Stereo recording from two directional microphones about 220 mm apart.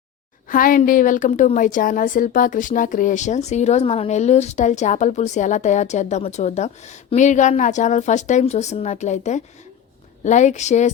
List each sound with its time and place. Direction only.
0.4 s a woman's voice: 40° left (ahead or behind)